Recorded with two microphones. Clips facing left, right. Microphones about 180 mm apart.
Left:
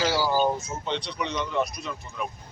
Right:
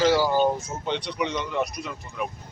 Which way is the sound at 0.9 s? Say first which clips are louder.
Right 3 dB; 15° right (ahead or behind).